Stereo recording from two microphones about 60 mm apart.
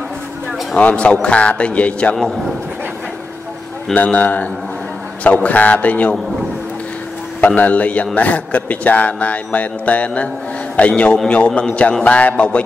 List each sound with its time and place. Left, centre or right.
0.7 s a man's voice: left
3.9 s a man's voice: left
7.3 s a man's voice: left